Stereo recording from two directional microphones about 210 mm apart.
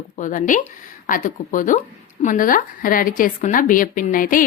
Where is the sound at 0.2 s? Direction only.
40° left (ahead or behind).